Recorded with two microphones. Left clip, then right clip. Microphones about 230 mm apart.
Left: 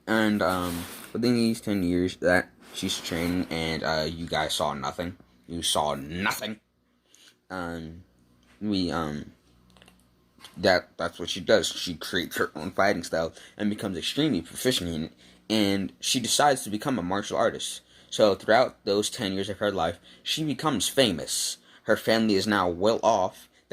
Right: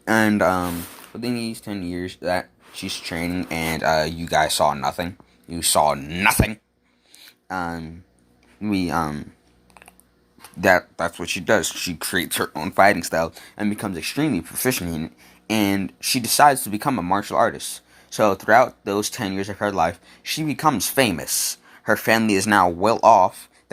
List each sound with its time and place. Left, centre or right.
0.1 s speech: right
1.2 s speech: centre; by 7.9 s right
8.9 s speech: right
10.6 s speech: right
16.0 s speech: centre
16.3 s speech: right
21.8 s speech: right
22.3 s speech: centre
22.5 s speech: right